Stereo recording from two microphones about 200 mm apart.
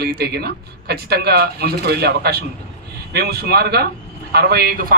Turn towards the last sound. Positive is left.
turn(degrees=-45)  # may be behind; listen again after turning